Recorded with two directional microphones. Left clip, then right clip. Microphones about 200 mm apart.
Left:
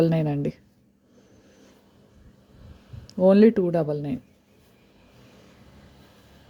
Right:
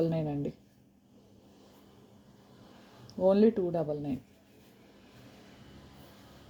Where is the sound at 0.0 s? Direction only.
30° left (ahead or behind).